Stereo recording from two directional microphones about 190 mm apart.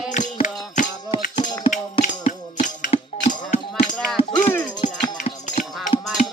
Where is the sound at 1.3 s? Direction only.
25° left (ahead or behind).